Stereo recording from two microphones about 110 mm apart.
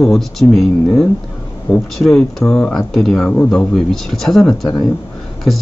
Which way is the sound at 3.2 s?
15° left (ahead or behind).